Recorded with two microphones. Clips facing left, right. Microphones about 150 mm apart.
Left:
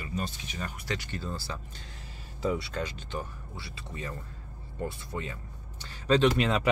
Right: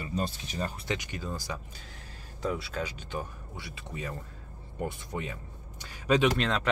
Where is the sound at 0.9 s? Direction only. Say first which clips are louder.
Right 1 dB; 15° right (ahead or behind).